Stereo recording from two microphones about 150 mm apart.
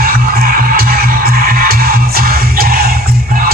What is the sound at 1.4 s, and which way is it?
Music, 70° right (ahead or behind).